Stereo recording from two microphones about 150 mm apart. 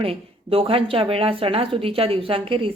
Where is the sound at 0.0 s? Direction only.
40° right (ahead or behind).